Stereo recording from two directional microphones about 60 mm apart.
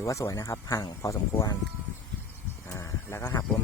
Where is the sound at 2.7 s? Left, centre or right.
Left.